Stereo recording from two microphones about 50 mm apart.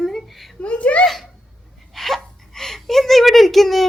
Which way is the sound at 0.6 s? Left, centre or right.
Left.